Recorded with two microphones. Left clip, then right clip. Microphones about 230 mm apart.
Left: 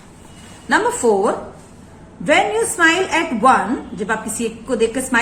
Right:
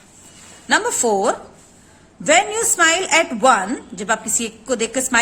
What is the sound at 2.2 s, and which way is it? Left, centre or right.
A woman's voice, right.